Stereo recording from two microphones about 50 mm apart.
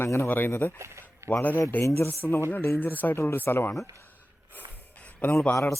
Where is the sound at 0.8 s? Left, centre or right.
Right.